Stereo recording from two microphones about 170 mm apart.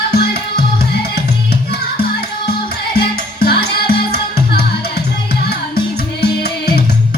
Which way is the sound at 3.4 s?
65° left (ahead or behind).